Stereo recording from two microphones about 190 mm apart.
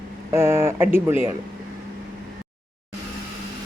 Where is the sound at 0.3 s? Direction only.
15° right (ahead or behind).